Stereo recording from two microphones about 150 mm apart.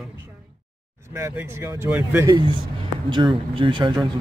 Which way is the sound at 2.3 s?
30° right (ahead or behind).